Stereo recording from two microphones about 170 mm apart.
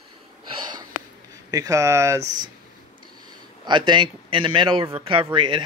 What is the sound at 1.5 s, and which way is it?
Speech, 20° right (ahead or behind).